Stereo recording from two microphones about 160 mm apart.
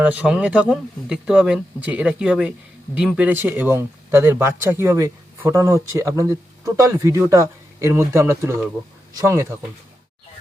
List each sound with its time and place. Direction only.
0.0 s speech: 10° right (ahead or behind)